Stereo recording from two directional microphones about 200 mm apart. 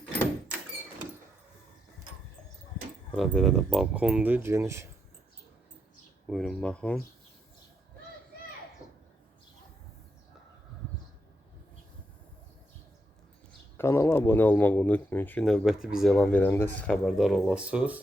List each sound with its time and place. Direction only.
3.2 s speech: centre (ahead or behind)
6.2 s speech: centre (ahead or behind)
8.8 s a sound: 15° left (ahead or behind)
13.7 s speech: 15° left (ahead or behind); by 18.0 s 5° right (ahead or behind)